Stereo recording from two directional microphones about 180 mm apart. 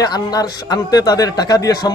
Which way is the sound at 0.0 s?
20° left (ahead or behind).